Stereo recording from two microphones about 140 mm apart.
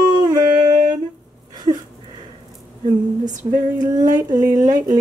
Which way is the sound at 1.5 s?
30° right (ahead or behind).